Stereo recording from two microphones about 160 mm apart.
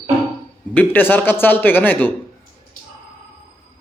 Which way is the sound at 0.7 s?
10° left (ahead or behind).